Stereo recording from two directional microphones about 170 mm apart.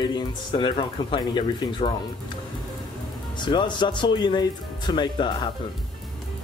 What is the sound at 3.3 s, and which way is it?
Speech, 25° left (ahead or behind).